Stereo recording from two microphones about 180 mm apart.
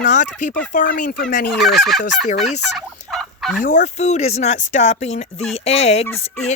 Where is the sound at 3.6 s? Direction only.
45° left (ahead or behind).